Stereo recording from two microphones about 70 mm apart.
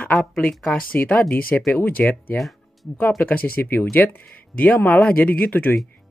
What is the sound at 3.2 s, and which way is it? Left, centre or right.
Speech, left.